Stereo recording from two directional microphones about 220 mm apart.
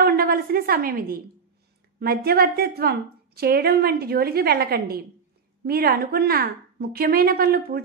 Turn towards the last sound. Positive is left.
turn(degrees=-45)  # may be behind; listen again after turning